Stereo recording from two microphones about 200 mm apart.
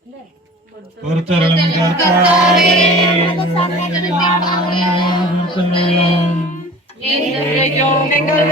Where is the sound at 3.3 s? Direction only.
25° left (ahead or behind).